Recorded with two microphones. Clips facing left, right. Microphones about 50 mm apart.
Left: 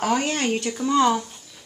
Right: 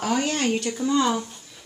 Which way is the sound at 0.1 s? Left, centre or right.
Centre.